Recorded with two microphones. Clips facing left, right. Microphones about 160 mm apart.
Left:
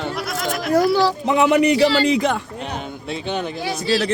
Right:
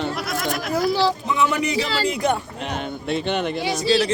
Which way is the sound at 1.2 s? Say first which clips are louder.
Left 6 dB; 70° left (ahead or behind).